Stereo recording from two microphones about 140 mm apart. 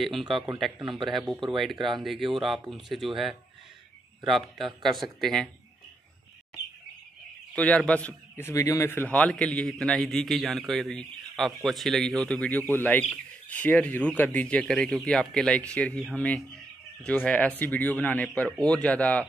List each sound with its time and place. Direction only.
0.0 s speech: centre (ahead or behind)
0.7 s speech: 35° right (ahead or behind)
1.0 s speech: centre (ahead or behind)
4.2 s speech: centre (ahead or behind)
7.5 s a man's voice: 10° left (ahead or behind)
8.4 s a man's voice: 20° left (ahead or behind)